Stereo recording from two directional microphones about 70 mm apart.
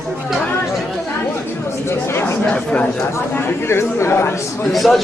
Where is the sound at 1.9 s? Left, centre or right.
Left.